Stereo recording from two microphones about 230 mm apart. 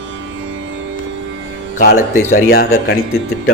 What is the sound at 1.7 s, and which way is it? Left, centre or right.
Speech, left.